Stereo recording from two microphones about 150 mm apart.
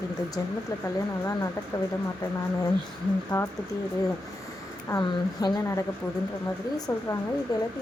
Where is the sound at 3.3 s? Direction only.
20° left (ahead or behind).